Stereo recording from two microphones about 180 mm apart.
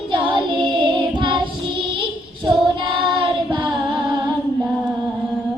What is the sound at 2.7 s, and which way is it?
Music, 30° right (ahead or behind).